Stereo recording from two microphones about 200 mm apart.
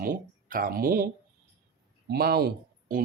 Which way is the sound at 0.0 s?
45° right (ahead or behind).